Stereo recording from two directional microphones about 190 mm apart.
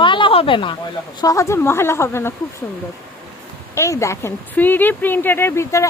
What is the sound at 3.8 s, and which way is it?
Speech, 15° left (ahead or behind).